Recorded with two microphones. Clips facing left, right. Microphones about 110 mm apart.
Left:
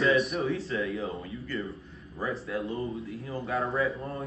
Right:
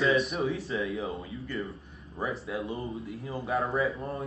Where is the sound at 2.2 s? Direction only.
25° right (ahead or behind).